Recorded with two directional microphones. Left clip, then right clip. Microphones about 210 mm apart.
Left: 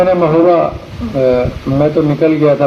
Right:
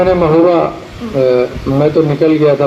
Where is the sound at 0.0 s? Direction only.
60° right (ahead or behind).